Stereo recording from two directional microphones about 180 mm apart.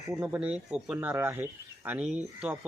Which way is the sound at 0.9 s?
15° right (ahead or behind).